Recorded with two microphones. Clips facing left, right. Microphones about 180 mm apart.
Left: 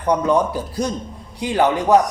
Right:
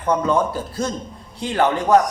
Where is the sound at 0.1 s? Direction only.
15° left (ahead or behind).